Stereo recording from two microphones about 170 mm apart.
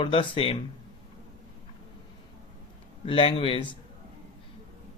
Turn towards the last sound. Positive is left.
turn(degrees=30)  # may be behind; listen again after turning